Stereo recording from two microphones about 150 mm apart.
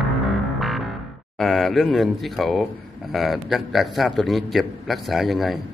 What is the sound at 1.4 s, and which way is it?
A man's voice, centre (ahead or behind).